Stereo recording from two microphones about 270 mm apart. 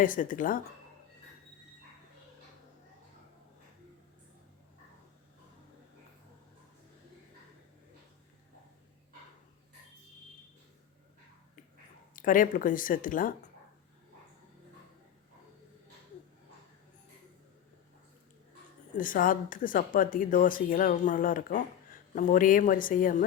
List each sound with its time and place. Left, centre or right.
0.0 s speech: left
12.1 s speech: left
18.9 s speech: left